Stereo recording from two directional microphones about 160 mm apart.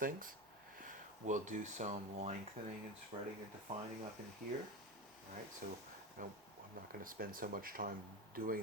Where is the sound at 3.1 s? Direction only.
30° right (ahead or behind).